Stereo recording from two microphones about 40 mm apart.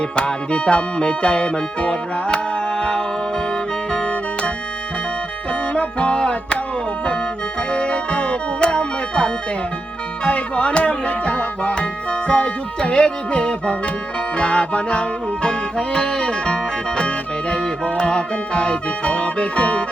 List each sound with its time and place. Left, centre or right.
0.2 s music: left
5.7 s music: left
7.7 s music: left
17.8 s music: left